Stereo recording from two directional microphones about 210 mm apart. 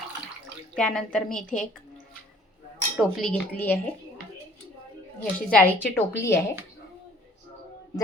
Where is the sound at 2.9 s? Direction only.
5° left (ahead or behind).